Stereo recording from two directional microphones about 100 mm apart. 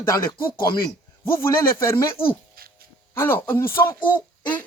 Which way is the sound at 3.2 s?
20° left (ahead or behind).